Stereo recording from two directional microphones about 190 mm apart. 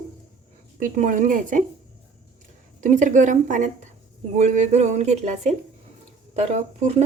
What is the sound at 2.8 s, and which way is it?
Speech, 40° right (ahead or behind).